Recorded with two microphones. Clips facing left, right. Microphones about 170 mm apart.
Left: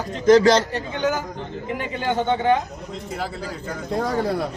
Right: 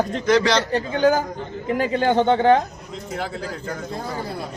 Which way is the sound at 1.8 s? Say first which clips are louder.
Right 6 dB; 40° right (ahead or behind).